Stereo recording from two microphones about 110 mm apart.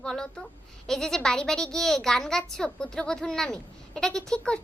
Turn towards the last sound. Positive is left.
turn(degrees=10)  # may be behind; listen again after turning